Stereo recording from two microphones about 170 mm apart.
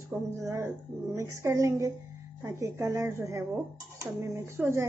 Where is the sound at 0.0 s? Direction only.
15° right (ahead or behind).